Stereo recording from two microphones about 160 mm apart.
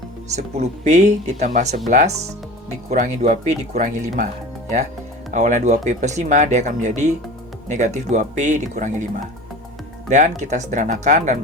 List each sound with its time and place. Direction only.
0.3 s speech: 45° right (ahead or behind)
5.3 s speech: 50° right (ahead or behind)
10.1 s speech: 50° right (ahead or behind)